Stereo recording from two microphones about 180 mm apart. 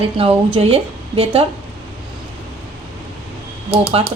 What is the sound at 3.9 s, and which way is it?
Speech, 30° right (ahead or behind).